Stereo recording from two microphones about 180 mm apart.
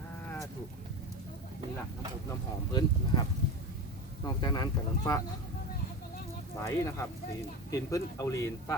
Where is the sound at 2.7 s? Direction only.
25° left (ahead or behind).